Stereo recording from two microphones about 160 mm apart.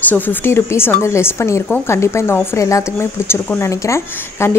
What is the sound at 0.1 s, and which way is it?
A woman's voice, 10° left (ahead or behind).